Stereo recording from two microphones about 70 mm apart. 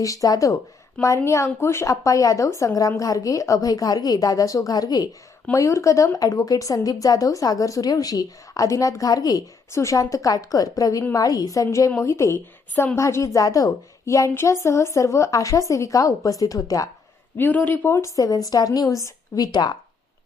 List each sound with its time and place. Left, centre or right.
0.0 s a woman's voice: left
4.7 s a woman's voice: left
5.5 s a woman's voice: left
9.7 s a woman's voice: left
17.3 s a woman's voice: left
18.3 s a woman's voice: left